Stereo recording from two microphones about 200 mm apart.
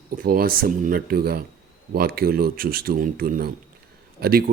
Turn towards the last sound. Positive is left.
turn(degrees=-50)  # may be behind; listen again after turning